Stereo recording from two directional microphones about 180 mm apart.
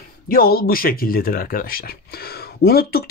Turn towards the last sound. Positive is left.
turn(degrees=60)  # may be behind; listen again after turning